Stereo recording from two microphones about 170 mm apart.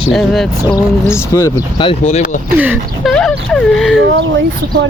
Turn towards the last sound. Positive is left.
turn(degrees=-90)